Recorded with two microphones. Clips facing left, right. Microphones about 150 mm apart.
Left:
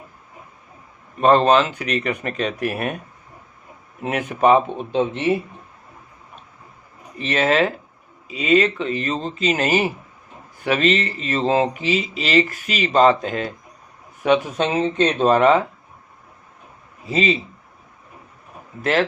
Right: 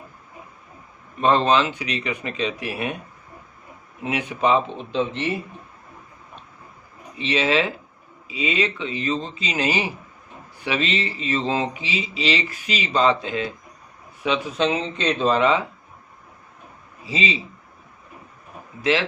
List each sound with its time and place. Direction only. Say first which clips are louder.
1.2 s speech: left 4 dB; 45° left (ahead or behind)
4.0 s speech: left 4 dB; 45° left (ahead or behind)
7.2 s speech: left 3 dB; 45° left (ahead or behind)
17.1 s speech: left 6 dB; 45° left (ahead or behind)
18.8 s speech: left 2 dB; 50° left (ahead or behind)